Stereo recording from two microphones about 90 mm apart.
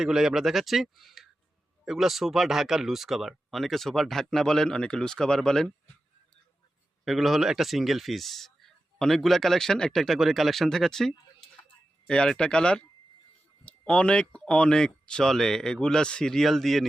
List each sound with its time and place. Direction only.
0.0 s speech: 5° right (ahead or behind)
7.0 s speech: centre (ahead or behind)